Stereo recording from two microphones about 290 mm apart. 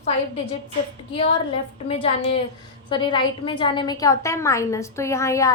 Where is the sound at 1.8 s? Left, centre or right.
Centre.